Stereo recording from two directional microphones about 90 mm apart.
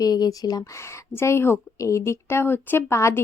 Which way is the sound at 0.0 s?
45° left (ahead or behind).